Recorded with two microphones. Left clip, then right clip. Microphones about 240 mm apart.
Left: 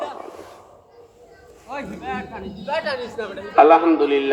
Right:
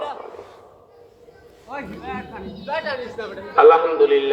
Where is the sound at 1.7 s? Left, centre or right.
Left.